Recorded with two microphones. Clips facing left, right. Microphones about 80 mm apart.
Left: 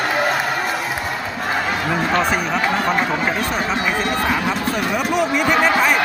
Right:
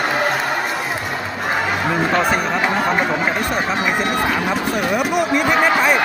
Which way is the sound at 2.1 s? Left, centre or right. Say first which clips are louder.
Even; centre.